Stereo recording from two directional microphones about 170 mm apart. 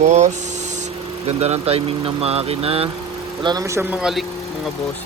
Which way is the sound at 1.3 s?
40° right (ahead or behind).